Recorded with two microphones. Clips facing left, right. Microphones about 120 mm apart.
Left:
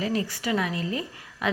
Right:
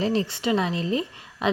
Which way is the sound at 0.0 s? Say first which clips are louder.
Right 4 dB; 25° right (ahead or behind).